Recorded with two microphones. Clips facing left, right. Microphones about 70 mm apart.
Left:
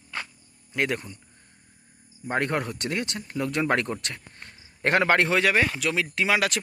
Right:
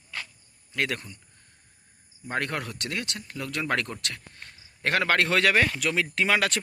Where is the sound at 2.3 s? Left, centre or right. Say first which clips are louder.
Left 4 dB; left.